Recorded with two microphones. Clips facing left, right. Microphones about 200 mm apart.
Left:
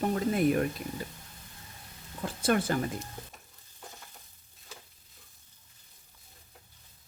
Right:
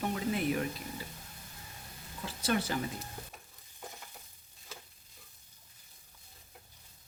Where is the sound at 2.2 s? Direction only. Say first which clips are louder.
Left 5 dB; 50° left (ahead or behind).